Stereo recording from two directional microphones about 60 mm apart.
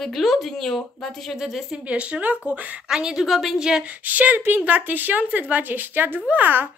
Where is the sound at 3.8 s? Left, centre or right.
Right.